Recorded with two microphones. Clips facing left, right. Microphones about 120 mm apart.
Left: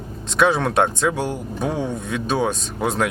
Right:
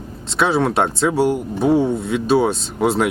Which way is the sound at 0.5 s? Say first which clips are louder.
Right 2 dB; 5° right (ahead or behind).